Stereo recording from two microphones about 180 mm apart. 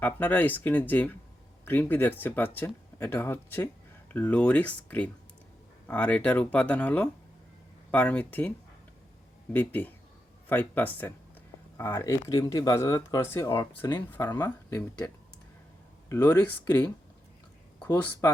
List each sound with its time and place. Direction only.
0.0 s speech: 10° left (ahead or behind)
17.7 s speech: 10° left (ahead or behind)